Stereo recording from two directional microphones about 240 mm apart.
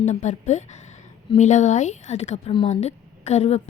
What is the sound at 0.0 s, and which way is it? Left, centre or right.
A woman's voice, left.